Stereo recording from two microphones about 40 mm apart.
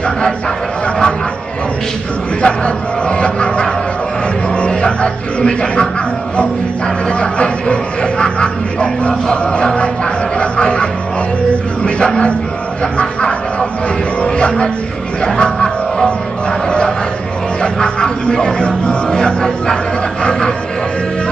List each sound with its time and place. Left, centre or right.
2.4 s music: left
4.6 s speech: left
7.1 s music: left
11.8 s speech: left
13.0 s a sound: left
15.2 s music: left
17.6 s a man's voice: left
19.0 s music: left